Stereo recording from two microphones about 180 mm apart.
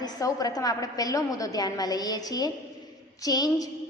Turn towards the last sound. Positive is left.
turn(degrees=20)  # may be behind; listen again after turning